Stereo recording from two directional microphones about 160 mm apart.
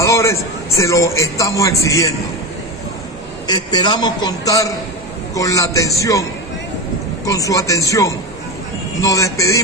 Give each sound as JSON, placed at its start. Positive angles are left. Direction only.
{"t": 0.0, "sound": "a man's voice", "side_deg": 20}
{"t": 3.4, "sound": "a man's voice", "side_deg": 25}
{"t": 7.2, "sound": "a man's voice", "side_deg": 20}